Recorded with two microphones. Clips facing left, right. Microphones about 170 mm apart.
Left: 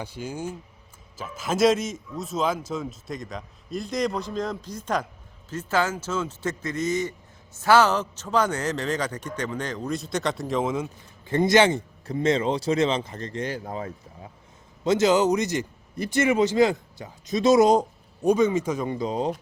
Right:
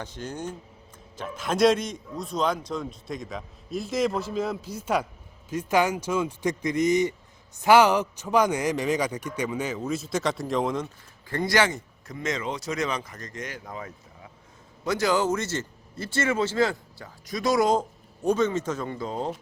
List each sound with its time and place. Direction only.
0.0 s a man's voice: 10° left (ahead or behind)
11.3 s speech: 20° left (ahead or behind)